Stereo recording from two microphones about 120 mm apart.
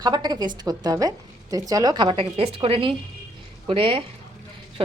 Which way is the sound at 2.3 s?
55° right (ahead or behind).